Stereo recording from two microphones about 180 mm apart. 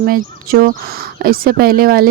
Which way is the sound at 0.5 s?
55° right (ahead or behind).